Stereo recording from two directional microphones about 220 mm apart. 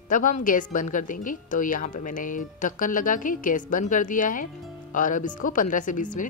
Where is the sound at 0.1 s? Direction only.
35° left (ahead or behind).